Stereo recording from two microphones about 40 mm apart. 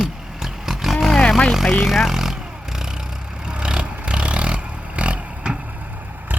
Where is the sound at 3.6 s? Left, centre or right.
Right.